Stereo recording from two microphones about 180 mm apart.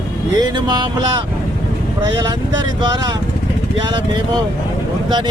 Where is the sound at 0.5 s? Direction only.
25° right (ahead or behind).